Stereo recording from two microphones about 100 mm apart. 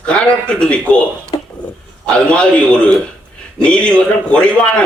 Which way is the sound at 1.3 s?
50° left (ahead or behind).